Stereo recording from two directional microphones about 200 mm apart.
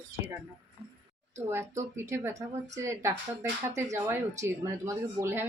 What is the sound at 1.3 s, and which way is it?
Speech, 15° right (ahead or behind).